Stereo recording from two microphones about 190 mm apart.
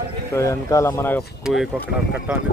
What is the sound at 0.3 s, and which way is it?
Speech, 15° left (ahead or behind).